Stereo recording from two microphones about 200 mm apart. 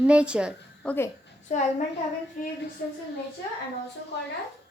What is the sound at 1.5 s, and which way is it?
Speech, 35° left (ahead or behind).